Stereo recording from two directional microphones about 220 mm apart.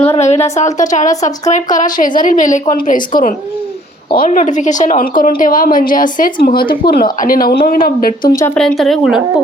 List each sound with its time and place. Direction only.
0.1 s a woman's voice: 30° left (ahead or behind)
8.2 s speech: 15° left (ahead or behind)
8.5 s speech: centre (ahead or behind)